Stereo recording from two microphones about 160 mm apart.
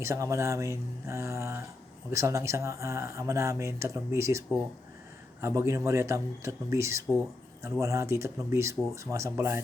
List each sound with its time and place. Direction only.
0.0 s speech: 20° right (ahead or behind)